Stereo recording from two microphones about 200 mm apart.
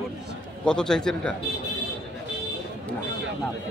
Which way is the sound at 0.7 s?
5° left (ahead or behind).